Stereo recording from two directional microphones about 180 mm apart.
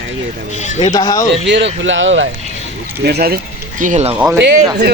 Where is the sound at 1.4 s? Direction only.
80° right.